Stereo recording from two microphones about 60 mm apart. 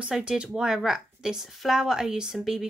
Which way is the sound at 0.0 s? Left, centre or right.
Centre.